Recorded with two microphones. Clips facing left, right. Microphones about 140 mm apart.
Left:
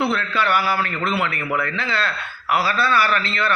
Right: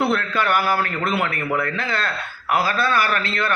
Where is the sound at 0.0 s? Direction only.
45° right (ahead or behind).